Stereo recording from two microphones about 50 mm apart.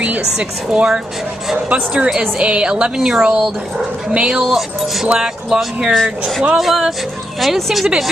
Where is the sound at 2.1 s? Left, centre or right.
Centre.